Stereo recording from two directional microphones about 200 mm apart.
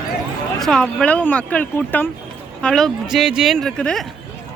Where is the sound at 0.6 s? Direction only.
Centre (ahead or behind).